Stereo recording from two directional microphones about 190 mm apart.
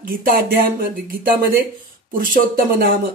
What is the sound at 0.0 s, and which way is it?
Speech, 50° right (ahead or behind).